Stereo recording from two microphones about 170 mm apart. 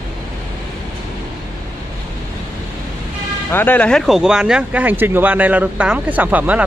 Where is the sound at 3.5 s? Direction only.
10° left (ahead or behind).